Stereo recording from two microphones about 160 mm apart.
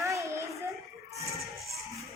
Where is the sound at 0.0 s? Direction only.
20° right (ahead or behind).